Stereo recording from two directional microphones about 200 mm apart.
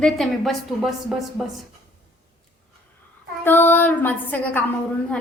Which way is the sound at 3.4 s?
10° left (ahead or behind).